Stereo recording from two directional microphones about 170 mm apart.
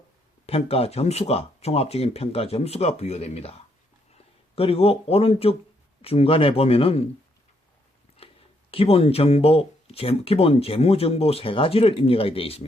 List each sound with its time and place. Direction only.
0.4 s speech: 35° left (ahead or behind)
8.2 s a sound: 35° left (ahead or behind)
8.7 s speech: 35° left (ahead or behind)